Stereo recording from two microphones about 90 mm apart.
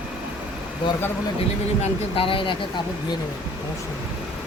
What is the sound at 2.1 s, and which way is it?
Speech, 85° left.